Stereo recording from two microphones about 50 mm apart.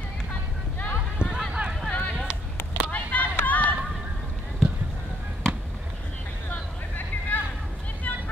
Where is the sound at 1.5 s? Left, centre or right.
Centre.